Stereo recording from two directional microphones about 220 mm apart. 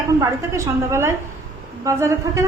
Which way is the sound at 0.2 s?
15° right (ahead or behind).